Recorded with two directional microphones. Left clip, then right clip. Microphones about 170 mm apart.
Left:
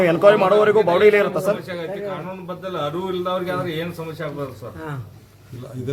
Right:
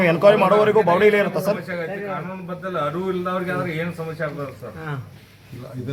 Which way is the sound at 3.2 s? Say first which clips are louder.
Left 1 dB; 50° left (ahead or behind).